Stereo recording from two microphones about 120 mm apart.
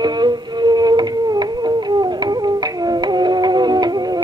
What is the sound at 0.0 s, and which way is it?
Music, 35° right (ahead or behind).